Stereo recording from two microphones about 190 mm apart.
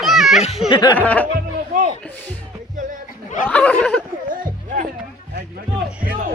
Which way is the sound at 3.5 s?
10° left (ahead or behind).